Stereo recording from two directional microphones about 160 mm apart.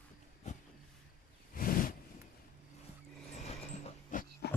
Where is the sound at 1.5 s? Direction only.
60° left (ahead or behind).